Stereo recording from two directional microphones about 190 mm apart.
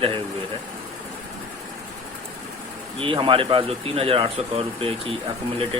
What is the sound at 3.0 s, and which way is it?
Speech, 25° right (ahead or behind).